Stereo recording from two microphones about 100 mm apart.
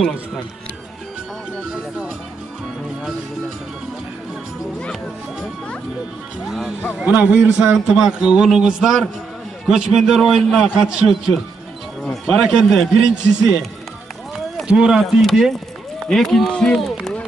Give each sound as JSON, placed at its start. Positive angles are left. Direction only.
{"t": 1.7, "sound": "music", "side_deg": -5}
{"t": 6.4, "sound": "a man's voice", "side_deg": -5}
{"t": 14.7, "sound": "a man's voice", "side_deg": -5}